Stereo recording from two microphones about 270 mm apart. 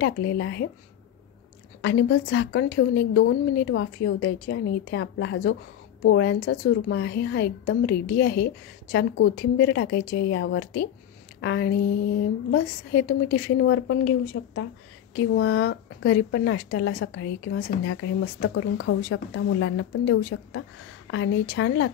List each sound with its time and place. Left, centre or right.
0.0 s a woman's voice: left
1.8 s a woman's voice: left